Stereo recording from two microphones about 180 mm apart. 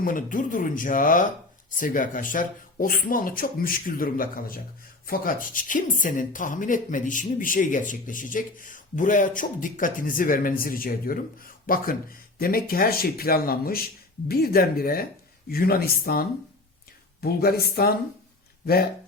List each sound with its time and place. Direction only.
0.0 s speech: 50° left (ahead or behind)